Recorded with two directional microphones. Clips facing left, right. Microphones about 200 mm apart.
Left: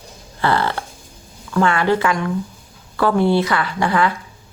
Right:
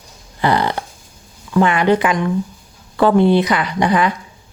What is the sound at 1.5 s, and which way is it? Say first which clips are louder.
A woman's voice: right 3 dB; 15° right (ahead or behind).